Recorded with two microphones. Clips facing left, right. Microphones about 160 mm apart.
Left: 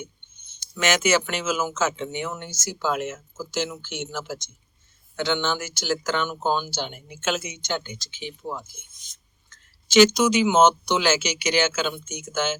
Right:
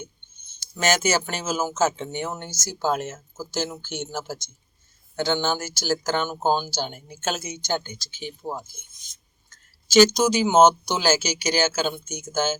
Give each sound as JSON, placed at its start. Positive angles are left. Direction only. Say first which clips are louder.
{"t": 0.8, "sound": "speech", "louder": "left 1 dB", "side_deg": -40}